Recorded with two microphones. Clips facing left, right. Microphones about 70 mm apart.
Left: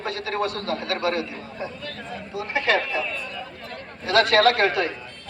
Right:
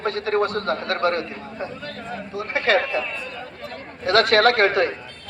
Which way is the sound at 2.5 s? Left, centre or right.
Right.